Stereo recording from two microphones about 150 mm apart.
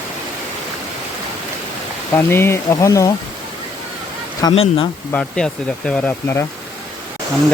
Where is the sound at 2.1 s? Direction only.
15° left (ahead or behind).